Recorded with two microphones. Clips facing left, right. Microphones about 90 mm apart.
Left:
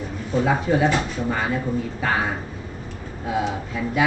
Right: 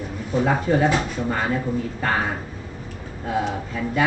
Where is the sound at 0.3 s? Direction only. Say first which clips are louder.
Even; centre (ahead or behind).